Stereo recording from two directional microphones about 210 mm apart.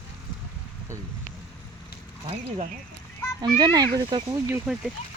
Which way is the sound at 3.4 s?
20° right (ahead or behind).